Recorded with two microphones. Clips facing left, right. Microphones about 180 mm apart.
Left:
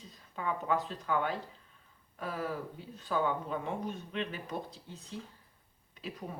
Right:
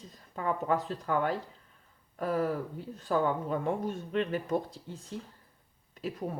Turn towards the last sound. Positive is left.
turn(degrees=-45)  # may be behind; listen again after turning